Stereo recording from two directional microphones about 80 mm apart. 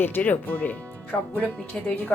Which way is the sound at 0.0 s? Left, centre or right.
Left.